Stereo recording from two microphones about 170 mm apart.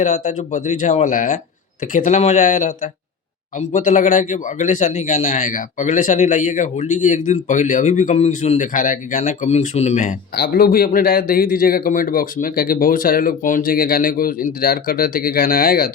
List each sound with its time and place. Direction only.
0.0 s speech: 45° left (ahead or behind)
10.3 s a man's voice: 60° left (ahead or behind)